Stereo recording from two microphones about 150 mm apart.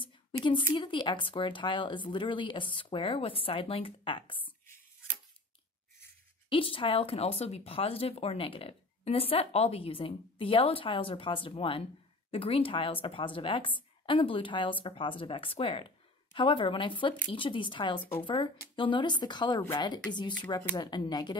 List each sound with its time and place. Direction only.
0.7 s speech: 30° left (ahead or behind)
4.5 s a sound: 15° left (ahead or behind)
6.5 s speech: 35° left (ahead or behind)